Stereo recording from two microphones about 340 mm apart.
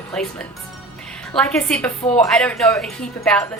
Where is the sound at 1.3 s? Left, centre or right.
Centre.